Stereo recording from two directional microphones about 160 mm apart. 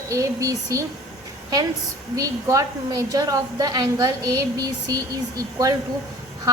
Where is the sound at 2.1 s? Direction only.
20° right (ahead or behind).